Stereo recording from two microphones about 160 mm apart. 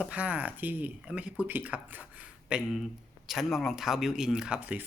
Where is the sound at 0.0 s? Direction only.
10° right (ahead or behind).